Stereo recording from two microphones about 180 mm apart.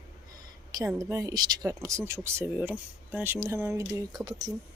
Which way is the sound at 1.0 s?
20° right (ahead or behind).